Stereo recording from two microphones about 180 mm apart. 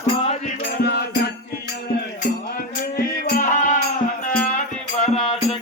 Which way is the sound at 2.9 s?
50° left (ahead or behind).